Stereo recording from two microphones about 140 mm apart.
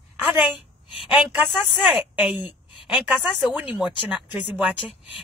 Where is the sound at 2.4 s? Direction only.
35° left (ahead or behind).